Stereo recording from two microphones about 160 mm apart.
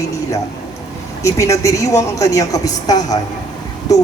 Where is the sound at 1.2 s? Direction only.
20° left (ahead or behind).